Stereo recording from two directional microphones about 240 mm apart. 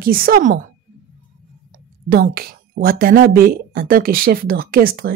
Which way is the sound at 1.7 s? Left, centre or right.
Right.